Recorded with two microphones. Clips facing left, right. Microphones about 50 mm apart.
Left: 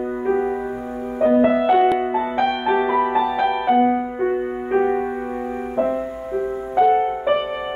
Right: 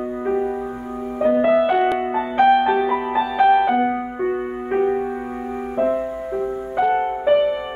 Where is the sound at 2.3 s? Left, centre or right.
Right.